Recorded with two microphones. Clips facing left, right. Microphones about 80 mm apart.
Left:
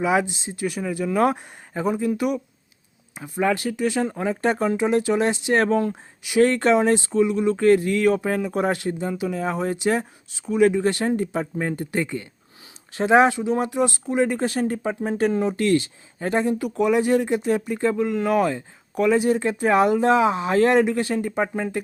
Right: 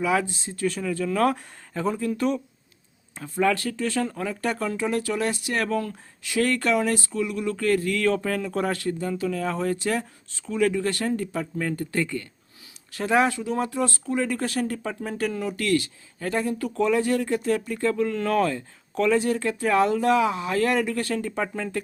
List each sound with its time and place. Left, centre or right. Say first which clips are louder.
0.0 s speech: left 3 dB; centre